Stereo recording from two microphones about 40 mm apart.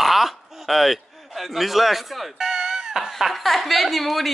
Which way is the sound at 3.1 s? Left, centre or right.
Centre.